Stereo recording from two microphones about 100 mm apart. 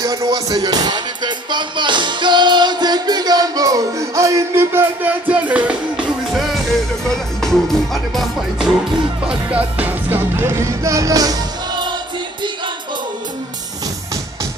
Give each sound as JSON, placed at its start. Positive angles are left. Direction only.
{"t": 0.0, "sound": "music", "side_deg": -40}
{"t": 9.3, "sound": "music", "side_deg": -10}